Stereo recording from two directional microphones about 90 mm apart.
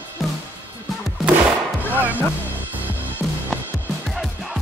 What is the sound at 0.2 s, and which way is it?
Music, centre (ahead or behind).